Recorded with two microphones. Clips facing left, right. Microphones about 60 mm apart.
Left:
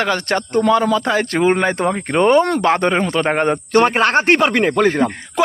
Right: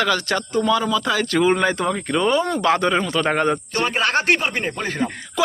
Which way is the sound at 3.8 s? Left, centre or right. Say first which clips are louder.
Left 3 dB; left.